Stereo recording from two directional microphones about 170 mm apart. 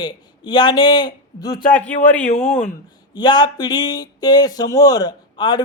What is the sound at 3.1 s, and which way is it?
A man's voice, 25° left (ahead or behind).